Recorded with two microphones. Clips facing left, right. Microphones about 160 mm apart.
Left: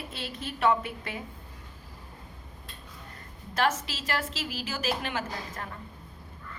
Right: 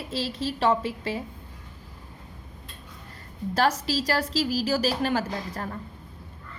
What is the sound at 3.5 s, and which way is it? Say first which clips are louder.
A woman's voice: right 4 dB; 35° right (ahead or behind).